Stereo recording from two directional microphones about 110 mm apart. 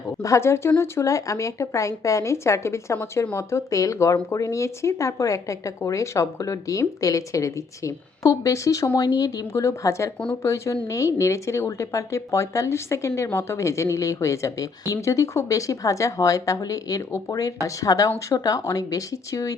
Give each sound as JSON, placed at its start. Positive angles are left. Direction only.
{"t": 0.2, "sound": "speech", "side_deg": 25}